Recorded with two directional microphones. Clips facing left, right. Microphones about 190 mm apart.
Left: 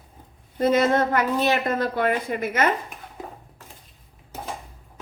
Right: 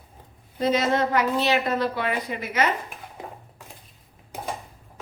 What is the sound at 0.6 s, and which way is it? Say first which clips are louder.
Speech: left 3 dB; 50° left (ahead or behind).